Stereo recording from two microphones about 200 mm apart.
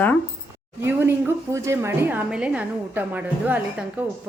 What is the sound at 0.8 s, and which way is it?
A woman's voice, 10° right (ahead or behind).